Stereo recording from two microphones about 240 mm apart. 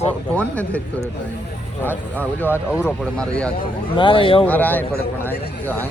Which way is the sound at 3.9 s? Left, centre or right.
Left.